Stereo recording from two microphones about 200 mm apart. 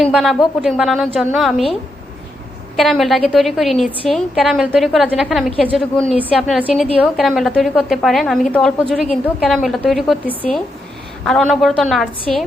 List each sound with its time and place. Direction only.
0.0 s a woman's voice: centre (ahead or behind)
2.7 s a woman's voice: centre (ahead or behind)